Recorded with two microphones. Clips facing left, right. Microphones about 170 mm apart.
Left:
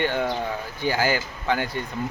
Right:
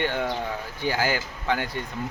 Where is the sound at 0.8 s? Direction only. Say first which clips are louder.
Left 2 dB; 35° left (ahead or behind).